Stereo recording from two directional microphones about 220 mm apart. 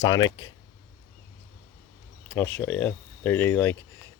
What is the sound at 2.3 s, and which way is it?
Speech, 10° left (ahead or behind).